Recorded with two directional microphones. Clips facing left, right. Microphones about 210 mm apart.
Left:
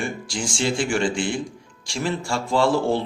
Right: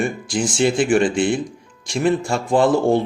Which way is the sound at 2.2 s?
20° right (ahead or behind).